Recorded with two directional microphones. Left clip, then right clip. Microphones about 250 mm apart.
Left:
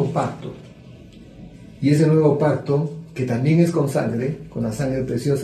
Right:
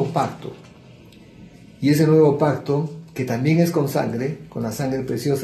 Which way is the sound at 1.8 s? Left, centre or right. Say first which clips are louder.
Right 2 dB; right.